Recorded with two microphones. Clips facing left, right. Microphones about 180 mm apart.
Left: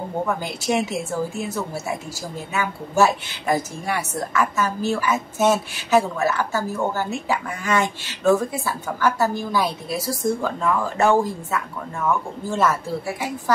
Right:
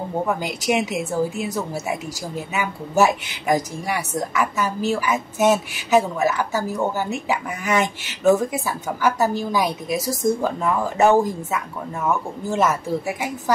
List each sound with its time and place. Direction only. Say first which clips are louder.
0.4 s a woman's voice: right 1 dB; 15° right (ahead or behind)